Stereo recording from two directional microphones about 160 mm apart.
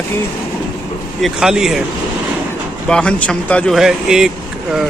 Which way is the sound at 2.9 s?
5° left (ahead or behind).